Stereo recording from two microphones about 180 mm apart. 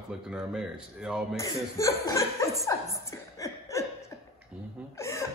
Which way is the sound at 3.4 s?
15° left (ahead or behind).